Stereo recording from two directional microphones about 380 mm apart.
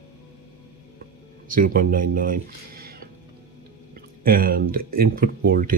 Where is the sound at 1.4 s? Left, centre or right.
Right.